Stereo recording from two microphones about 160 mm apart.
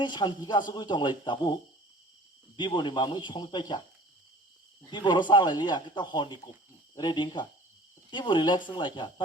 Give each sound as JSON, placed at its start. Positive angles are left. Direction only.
{"t": 0.0, "sound": "speech", "side_deg": 30}
{"t": 2.6, "sound": "speech", "side_deg": 30}
{"t": 4.9, "sound": "speech", "side_deg": 30}